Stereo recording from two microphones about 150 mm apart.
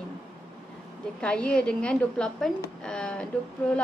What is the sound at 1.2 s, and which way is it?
A woman's voice, 5° left (ahead or behind).